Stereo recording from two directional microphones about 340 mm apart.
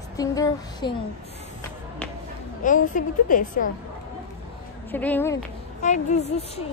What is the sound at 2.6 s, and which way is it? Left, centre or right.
A woman's voice, left.